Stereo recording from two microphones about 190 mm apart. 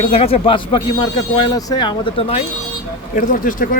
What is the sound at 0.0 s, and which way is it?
Speech, 30° left (ahead or behind).